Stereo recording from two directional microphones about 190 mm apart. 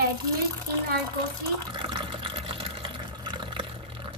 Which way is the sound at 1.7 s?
25° right (ahead or behind).